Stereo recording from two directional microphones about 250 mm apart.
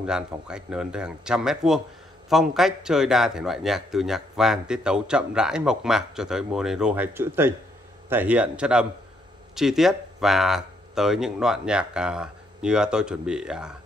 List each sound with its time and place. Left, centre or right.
0.0 s a man's voice: centre